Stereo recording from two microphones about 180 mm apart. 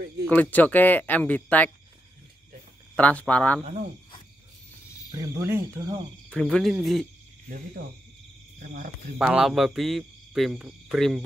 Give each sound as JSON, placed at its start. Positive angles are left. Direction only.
{"t": 0.3, "sound": "speech", "side_deg": 10}
{"t": 3.0, "sound": "speech", "side_deg": 10}
{"t": 3.6, "sound": "speech", "side_deg": -40}
{"t": 5.1, "sound": "speech", "side_deg": -15}
{"t": 6.3, "sound": "speech", "side_deg": 5}
{"t": 9.2, "sound": "speech", "side_deg": -5}